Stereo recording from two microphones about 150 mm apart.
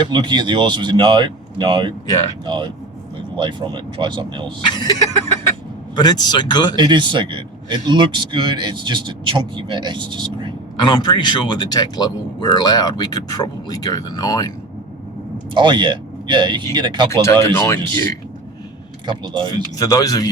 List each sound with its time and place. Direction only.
0.0 s a man's voice: 30° right (ahead or behind)
6.0 s speech: 30° left (ahead or behind)
6.7 s a man's voice: 30° right (ahead or behind)
10.8 s speech: 30° left (ahead or behind)
15.5 s a man's voice: 30° right (ahead or behind)
17.1 s speech: 20° left (ahead or behind)
19.0 s a man's voice: 30° right (ahead or behind)
19.5 s speech: 25° left (ahead or behind)